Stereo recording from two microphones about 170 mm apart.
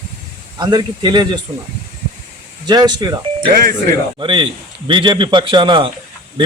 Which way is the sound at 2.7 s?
25° right (ahead or behind).